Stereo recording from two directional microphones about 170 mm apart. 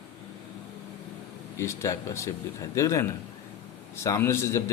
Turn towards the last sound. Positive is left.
turn(degrees=15)  # may be behind; listen again after turning